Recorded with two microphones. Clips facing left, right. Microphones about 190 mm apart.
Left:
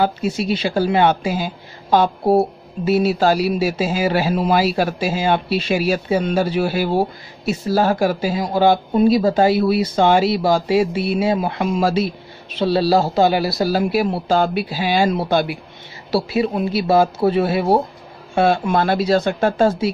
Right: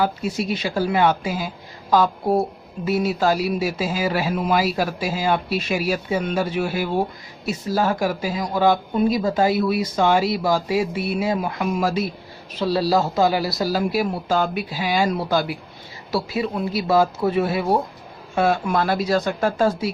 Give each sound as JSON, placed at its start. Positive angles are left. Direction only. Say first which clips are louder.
{"t": 0.0, "sound": "speech", "louder": "left 3 dB", "side_deg": 25}